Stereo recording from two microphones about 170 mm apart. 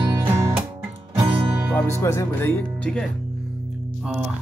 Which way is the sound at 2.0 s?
15° left (ahead or behind).